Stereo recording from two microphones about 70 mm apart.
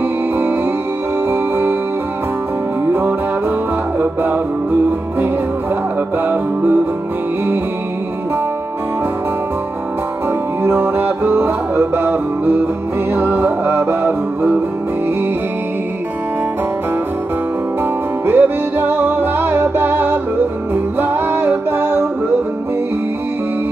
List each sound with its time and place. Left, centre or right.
1.3 s music: right
2.9 s music: right
6.2 s music: right
10.6 s music: right
18.2 s music: right